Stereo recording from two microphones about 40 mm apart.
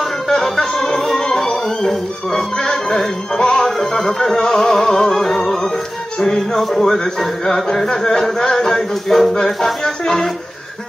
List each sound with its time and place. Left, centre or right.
0.3 s music: centre
9.8 s speech: centre